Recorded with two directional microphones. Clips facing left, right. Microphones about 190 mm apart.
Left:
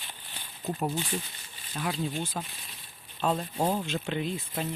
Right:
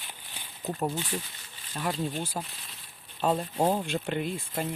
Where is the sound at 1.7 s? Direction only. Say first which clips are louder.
Right 1 dB; centre (ahead or behind).